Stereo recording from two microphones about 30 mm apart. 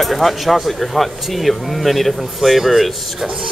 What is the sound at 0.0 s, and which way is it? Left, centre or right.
Speech, centre.